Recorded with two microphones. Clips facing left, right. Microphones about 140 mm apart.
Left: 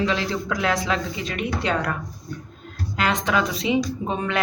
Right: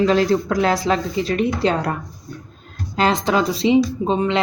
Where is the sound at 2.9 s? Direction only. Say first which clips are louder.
Right 5 dB; 30° right (ahead or behind).